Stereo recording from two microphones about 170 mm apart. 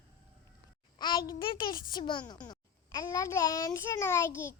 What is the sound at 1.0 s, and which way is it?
Child singing, 25° left (ahead or behind).